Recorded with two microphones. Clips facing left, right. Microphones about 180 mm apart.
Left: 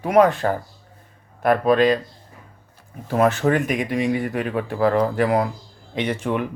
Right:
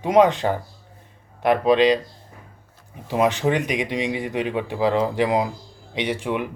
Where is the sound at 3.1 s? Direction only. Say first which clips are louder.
Left 2 dB; 15° right (ahead or behind).